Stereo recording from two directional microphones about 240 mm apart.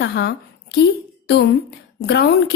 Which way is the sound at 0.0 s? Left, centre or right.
Left.